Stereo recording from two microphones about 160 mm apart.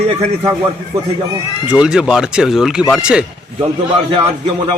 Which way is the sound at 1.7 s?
5° right (ahead or behind).